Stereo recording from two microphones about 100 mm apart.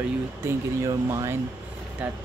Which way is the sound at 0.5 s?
30° right (ahead or behind).